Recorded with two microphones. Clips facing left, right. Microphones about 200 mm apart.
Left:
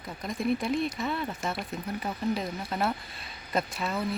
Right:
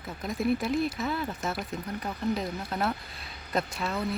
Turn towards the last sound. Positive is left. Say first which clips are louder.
# even
turn(degrees=0)  # may be behind; listen again after turning